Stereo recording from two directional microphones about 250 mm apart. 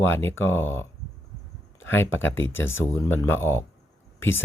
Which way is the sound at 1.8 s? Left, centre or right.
Left.